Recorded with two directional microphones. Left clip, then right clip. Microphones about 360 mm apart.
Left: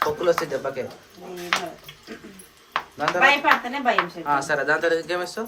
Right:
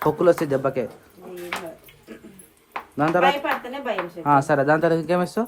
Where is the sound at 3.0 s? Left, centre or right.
Centre.